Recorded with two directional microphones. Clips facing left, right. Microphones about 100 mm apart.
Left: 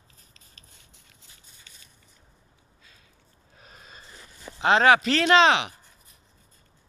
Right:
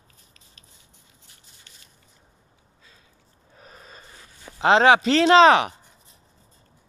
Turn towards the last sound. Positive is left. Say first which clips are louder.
# right 5 dB
turn(degrees=-45)  # may be behind; listen again after turning